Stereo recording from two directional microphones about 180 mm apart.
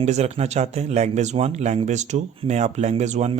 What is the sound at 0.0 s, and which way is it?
Speech, 35° right (ahead or behind).